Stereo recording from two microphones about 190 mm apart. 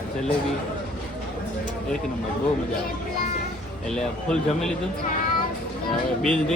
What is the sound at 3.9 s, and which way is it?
Speech, 5° left (ahead or behind).